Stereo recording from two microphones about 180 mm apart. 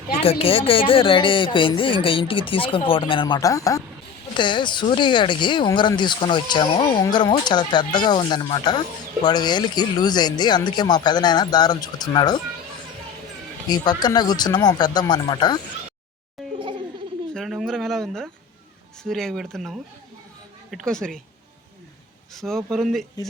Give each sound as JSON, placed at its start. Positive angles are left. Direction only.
{"t": 0.2, "sound": "speech", "side_deg": 30}
{"t": 13.7, "sound": "speech", "side_deg": 25}
{"t": 16.6, "sound": "a sound", "side_deg": -25}
{"t": 17.3, "sound": "a sound", "side_deg": 0}
{"t": 19.0, "sound": "speech", "side_deg": 0}
{"t": 22.4, "sound": "speech", "side_deg": 0}